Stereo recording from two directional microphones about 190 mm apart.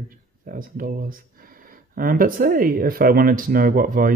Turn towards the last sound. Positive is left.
turn(degrees=-45)  # may be behind; listen again after turning